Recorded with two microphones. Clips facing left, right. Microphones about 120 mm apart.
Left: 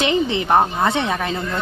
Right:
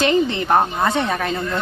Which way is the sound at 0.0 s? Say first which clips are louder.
Right 1 dB; 20° left (ahead or behind).